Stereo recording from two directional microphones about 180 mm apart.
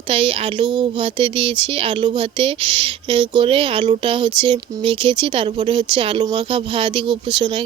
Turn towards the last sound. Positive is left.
turn(degrees=-25)  # may be behind; listen again after turning